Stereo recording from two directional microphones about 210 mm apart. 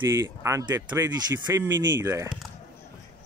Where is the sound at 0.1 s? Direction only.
10° right (ahead or behind).